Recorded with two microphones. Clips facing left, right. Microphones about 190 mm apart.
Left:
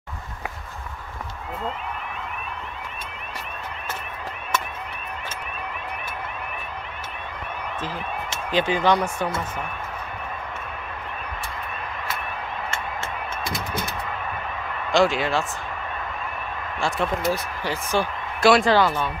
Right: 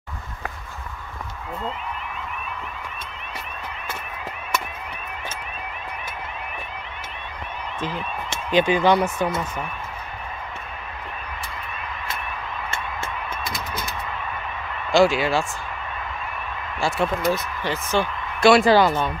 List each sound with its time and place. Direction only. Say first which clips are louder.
7.8 s speech: right 4 dB; 20° right (ahead or behind)
14.9 s speech: right 3 dB; 5° right (ahead or behind)
17.3 s speech: right 2 dB; 10° left (ahead or behind)
18.7 s speech: right 3 dB; 15° right (ahead or behind)